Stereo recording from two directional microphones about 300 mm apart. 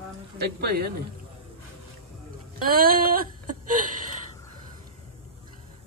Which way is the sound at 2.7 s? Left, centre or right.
Right.